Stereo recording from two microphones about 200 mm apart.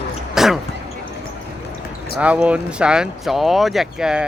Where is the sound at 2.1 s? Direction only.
5° right (ahead or behind).